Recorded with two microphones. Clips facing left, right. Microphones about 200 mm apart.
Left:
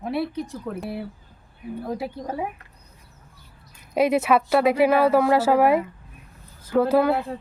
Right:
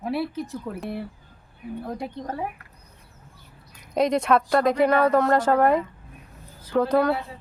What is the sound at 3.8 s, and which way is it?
Speech, 5° left (ahead or behind).